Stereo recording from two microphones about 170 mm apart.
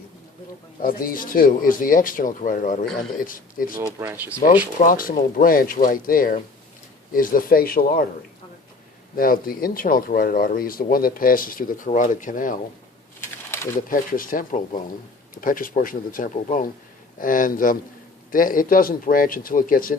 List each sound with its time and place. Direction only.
0.8 s speech: 60° left (ahead or behind)
4.0 s speech: 10° right (ahead or behind)
4.8 s speech: 55° left (ahead or behind)
9.1 s speech: 55° left (ahead or behind)
13.7 s speech: 55° left (ahead or behind)